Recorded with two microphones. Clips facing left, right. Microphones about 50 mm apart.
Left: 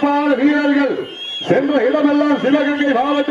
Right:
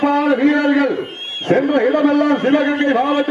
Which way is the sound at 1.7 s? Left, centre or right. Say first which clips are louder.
Even; centre.